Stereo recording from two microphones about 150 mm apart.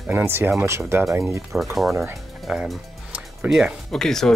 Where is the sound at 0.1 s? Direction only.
15° right (ahead or behind).